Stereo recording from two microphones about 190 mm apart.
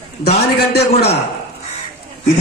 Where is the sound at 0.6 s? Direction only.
60° left (ahead or behind).